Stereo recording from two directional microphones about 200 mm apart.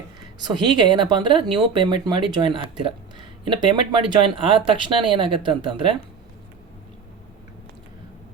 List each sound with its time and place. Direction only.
0.4 s speech: 20° right (ahead or behind)